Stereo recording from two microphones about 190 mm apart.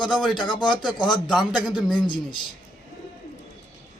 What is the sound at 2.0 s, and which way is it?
Speech, 25° left (ahead or behind).